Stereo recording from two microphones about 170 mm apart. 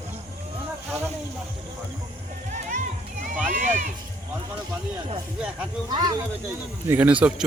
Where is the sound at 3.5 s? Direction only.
50° right (ahead or behind).